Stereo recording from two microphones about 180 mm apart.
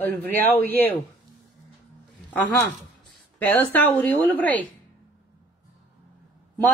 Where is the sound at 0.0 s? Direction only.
10° left (ahead or behind).